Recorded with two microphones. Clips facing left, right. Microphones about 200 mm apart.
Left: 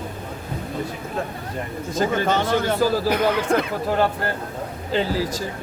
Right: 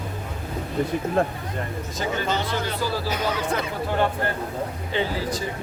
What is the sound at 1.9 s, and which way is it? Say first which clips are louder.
Speech: left 6 dB; 50° left (ahead or behind).